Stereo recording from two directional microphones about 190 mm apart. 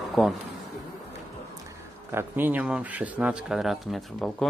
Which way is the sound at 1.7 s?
15° right (ahead or behind).